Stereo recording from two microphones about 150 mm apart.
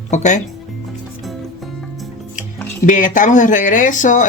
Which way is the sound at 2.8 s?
60° left (ahead or behind).